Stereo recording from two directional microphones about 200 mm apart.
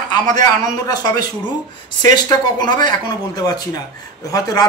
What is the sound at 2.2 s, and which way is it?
Speech, 20° left (ahead or behind).